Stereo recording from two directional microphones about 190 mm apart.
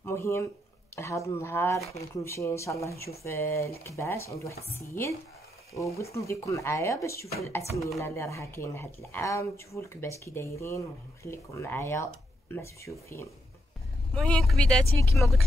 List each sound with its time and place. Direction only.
0.0 s a sound: 15° left (ahead or behind)
0.9 s speech: 15° left (ahead or behind)
14.1 s speech: 5° left (ahead or behind)